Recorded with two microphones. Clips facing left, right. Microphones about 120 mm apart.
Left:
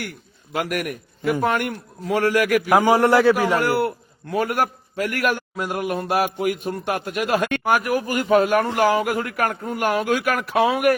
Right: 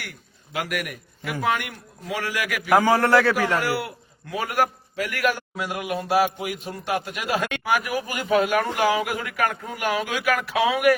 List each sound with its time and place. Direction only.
0.5 s a man's voice: 45° left (ahead or behind)
2.6 s a man's voice: 15° left (ahead or behind)
3.6 s a man's voice: 50° left (ahead or behind)